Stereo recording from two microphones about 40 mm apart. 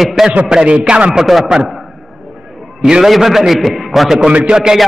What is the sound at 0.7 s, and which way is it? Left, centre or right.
Speech, right.